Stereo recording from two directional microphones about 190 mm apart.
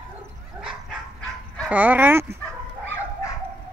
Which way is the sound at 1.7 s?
10° right (ahead or behind).